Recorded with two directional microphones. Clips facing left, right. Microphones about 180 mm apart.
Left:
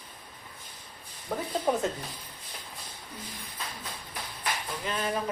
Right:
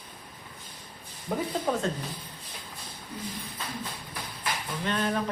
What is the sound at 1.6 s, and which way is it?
Speech, 15° left (ahead or behind).